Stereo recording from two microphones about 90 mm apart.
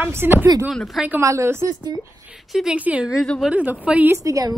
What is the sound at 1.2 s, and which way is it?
Speech, 35° right (ahead or behind).